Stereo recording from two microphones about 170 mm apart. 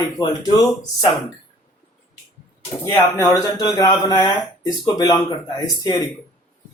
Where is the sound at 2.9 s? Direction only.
20° left (ahead or behind).